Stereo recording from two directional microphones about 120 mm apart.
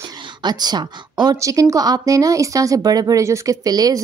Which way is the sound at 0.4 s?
35° right (ahead or behind).